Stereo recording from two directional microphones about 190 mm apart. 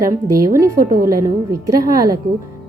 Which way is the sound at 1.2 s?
20° right (ahead or behind).